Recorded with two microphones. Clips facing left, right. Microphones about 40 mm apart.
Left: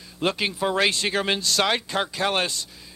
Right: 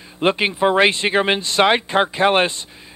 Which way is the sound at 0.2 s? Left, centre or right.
Right.